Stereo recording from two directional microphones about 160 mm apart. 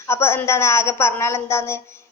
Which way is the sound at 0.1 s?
15° left (ahead or behind).